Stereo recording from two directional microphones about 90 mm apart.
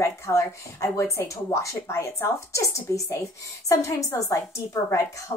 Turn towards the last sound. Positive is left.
turn(degrees=35)  # may be behind; listen again after turning